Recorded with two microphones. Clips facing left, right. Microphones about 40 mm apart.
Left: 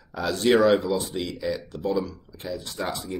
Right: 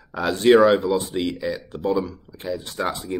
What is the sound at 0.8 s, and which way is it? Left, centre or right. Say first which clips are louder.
Speech: right 4 dB; right.